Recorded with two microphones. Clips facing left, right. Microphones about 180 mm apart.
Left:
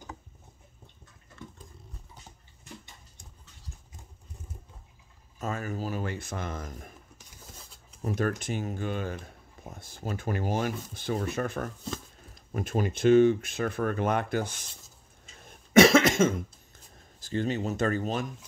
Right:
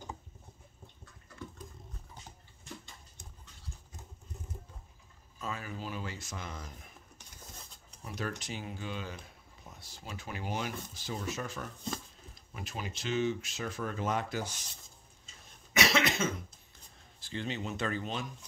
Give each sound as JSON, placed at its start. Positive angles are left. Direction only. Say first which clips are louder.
{"t": 5.4, "sound": "speech", "louder": "left 7 dB", "side_deg": 45}
{"t": 8.0, "sound": "speech", "louder": "left 9 dB", "side_deg": 50}
{"t": 15.7, "sound": "cough", "louder": "left 11 dB", "side_deg": 50}
{"t": 17.2, "sound": "speech", "louder": "left 8 dB", "side_deg": 45}